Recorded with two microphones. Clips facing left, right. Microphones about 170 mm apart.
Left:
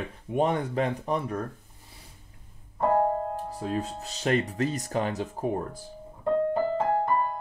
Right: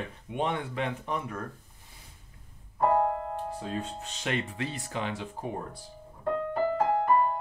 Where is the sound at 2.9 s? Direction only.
40° left (ahead or behind).